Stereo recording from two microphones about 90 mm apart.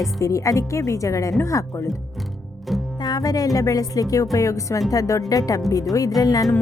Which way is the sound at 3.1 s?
45° left (ahead or behind).